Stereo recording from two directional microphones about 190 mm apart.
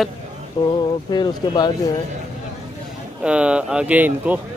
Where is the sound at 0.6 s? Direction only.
25° left (ahead or behind).